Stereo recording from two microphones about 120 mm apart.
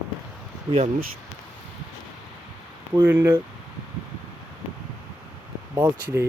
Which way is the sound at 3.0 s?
20° right (ahead or behind).